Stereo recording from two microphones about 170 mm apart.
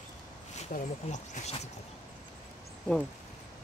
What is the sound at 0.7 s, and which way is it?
Speech, 50° left (ahead or behind).